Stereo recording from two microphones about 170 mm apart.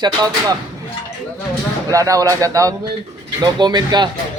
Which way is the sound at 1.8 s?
20° right (ahead or behind).